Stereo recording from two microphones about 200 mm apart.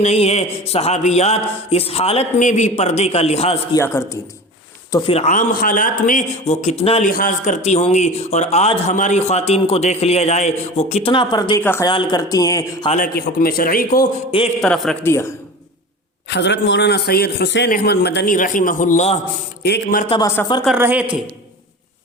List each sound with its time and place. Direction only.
0.0 s a man's voice: 35° left (ahead or behind)
3.8 s a man's voice: 15° left (ahead or behind)
5.1 s a man's voice: 40° left (ahead or behind)
7.1 s a man's voice: 40° left (ahead or behind); by 12.9 s 15° left (ahead or behind)
12.9 s a man's voice: 45° left (ahead or behind)
14.3 s speech: 30° left (ahead or behind)
14.6 s a man's voice: 5° left (ahead or behind)
16.3 s a man's voice: 60° left (ahead or behind)
17.7 s a man's voice: 50° left (ahead or behind)
19.6 s a man's voice: 50° left (ahead or behind)
20.1 s speech: 20° left (ahead or behind)
20.7 s a woman's voice: 10° right (ahead or behind)